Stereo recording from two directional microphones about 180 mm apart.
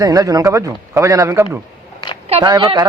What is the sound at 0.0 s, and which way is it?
Speech, 20° right (ahead or behind).